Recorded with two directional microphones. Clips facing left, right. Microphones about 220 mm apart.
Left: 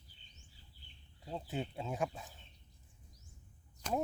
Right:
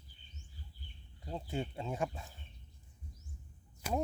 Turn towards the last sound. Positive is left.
turn(degrees=-10)  # may be behind; listen again after turning